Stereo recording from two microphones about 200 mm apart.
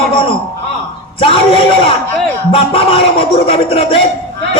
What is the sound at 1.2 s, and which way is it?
A man's voice, 25° left (ahead or behind).